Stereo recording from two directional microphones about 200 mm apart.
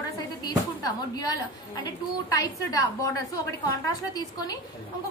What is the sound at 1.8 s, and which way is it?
A woman's voice, 20° left (ahead or behind).